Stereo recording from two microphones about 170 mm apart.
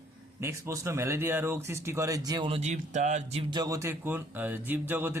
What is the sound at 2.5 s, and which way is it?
Speech, 40° right (ahead or behind).